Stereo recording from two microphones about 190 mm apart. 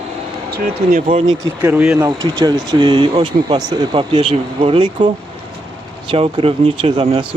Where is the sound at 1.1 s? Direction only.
25° right (ahead or behind).